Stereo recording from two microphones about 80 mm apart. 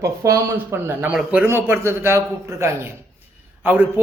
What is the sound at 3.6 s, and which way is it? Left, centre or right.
Speech, right.